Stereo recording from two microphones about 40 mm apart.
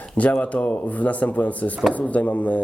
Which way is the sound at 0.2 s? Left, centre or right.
Left.